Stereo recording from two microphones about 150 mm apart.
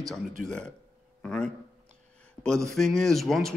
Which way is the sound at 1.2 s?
5° left (ahead or behind).